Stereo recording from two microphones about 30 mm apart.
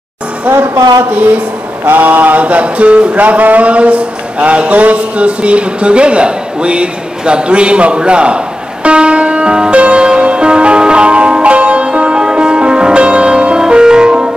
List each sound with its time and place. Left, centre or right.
0.5 s male singing: right
1.9 s male singing: right
3.2 s speech: right
8.8 s music: right